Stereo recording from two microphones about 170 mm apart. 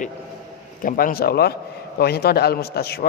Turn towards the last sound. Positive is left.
turn(degrees=65)  # may be behind; listen again after turning